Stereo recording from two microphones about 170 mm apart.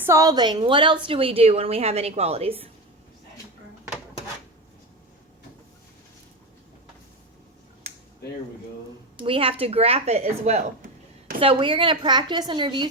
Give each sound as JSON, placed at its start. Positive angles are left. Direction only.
{"t": 0.0, "sound": "a woman's voice", "side_deg": -20}
{"t": 7.9, "sound": "a sound", "side_deg": -40}
{"t": 9.1, "sound": "a woman's voice", "side_deg": -30}
{"t": 11.3, "sound": "a woman's voice", "side_deg": -30}